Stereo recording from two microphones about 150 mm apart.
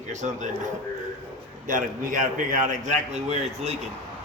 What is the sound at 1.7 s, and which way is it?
A man's voice, 65° right (ahead or behind).